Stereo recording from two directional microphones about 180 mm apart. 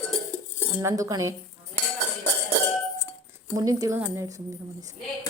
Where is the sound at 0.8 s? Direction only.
20° right (ahead or behind).